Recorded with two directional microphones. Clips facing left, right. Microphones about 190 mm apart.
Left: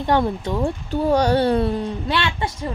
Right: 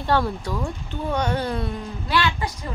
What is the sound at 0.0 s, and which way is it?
Speech, 20° left (ahead or behind).